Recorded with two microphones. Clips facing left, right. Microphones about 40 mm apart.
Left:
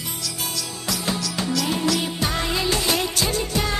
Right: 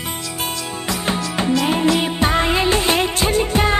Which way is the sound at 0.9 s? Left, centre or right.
Right.